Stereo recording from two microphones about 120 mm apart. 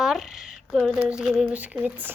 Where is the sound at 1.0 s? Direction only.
5° right (ahead or behind).